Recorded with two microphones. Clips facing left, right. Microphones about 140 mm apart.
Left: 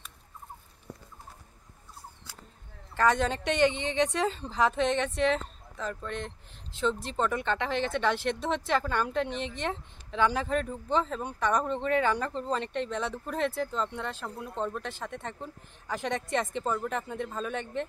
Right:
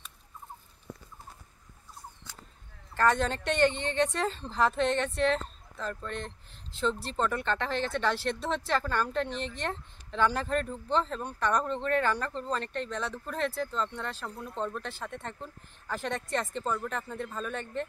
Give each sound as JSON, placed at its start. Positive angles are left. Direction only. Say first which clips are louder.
{"t": 3.2, "sound": "speech", "louder": "left 1 dB", "side_deg": 10}